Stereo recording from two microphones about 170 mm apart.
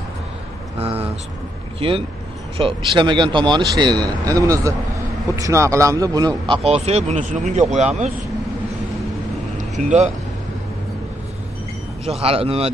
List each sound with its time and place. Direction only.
1.8 s speech: 30° right (ahead or behind)
9.6 s vehicle: 45° right (ahead or behind)
12.0 s speech: 35° right (ahead or behind)